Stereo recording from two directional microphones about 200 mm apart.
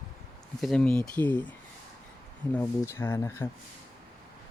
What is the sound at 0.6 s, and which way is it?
Speech, 5° left (ahead or behind).